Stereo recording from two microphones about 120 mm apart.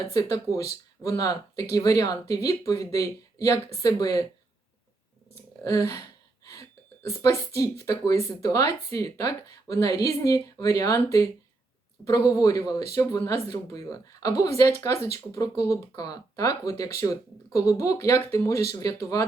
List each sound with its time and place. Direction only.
0.1 s speech: 30° left (ahead or behind)
5.6 s speech: 30° left (ahead or behind)